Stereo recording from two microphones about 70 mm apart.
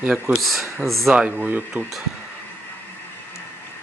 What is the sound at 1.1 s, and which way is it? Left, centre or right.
Speech, centre.